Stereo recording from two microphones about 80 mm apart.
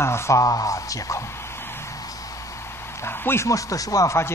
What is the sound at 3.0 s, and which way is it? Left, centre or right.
Speech, left.